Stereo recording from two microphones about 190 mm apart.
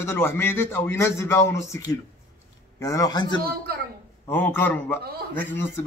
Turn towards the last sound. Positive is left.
turn(degrees=10)  # may be behind; listen again after turning